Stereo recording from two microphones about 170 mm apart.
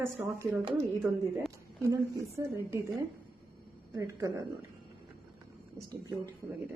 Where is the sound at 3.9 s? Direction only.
20° right (ahead or behind).